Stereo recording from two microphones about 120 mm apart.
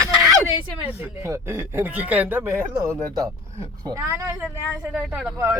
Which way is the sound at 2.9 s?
15° left (ahead or behind).